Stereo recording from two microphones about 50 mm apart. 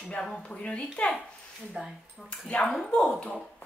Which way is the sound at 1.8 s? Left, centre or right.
Centre.